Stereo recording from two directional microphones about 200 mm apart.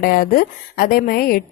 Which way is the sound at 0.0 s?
45° left (ahead or behind).